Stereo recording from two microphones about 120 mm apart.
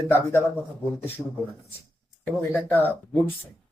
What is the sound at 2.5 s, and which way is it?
Speech, 15° left (ahead or behind).